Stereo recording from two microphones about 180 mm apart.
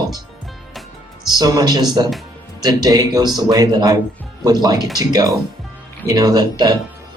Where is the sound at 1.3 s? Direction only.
20° right (ahead or behind).